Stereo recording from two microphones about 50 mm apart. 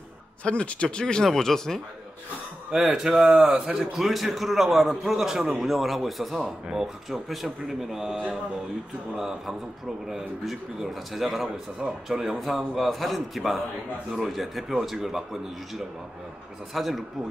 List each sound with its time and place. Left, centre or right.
0.4 s speech: left
2.7 s a man's voice: centre
16.7 s speech: centre